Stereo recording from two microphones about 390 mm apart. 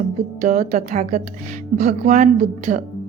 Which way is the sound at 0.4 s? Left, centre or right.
Centre.